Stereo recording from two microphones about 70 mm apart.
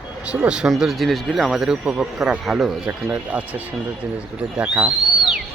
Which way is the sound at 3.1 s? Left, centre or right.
Right.